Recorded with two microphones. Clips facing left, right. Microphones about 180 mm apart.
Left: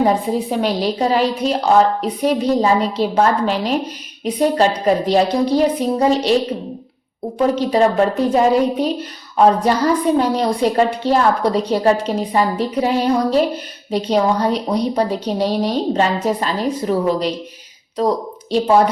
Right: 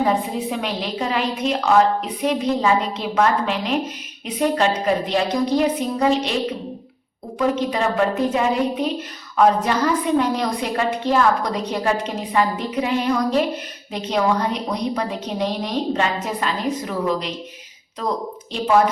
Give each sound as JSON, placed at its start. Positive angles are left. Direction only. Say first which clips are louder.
{"t": 0.5, "sound": "a woman's voice", "louder": "left 7 dB", "side_deg": 35}
{"t": 7.3, "sound": "a woman's voice", "louder": "left 5 dB", "side_deg": 35}